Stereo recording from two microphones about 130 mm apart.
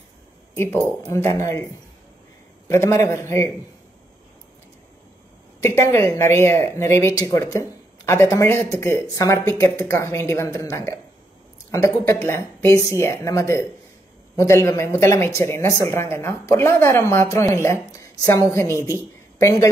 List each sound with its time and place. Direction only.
1.1 s speech: 20° left (ahead or behind)
2.7 s speech: 20° left (ahead or behind)
5.6 s a woman's voice: 20° left (ahead or behind)